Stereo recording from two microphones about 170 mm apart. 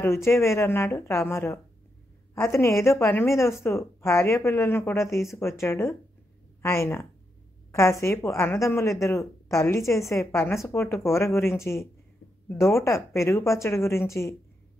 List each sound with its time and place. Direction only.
0.0 s a woman's voice: 15° left (ahead or behind)